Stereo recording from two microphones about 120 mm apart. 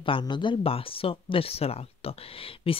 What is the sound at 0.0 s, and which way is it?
Speech, 45° left (ahead or behind).